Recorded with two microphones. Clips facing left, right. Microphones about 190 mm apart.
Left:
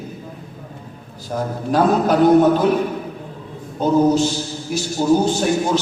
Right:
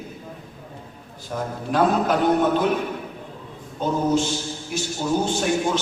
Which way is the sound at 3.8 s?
35° left (ahead or behind).